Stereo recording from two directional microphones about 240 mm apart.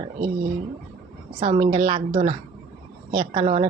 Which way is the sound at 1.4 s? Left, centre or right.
Right.